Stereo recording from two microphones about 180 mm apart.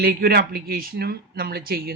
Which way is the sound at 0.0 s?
60° right (ahead or behind).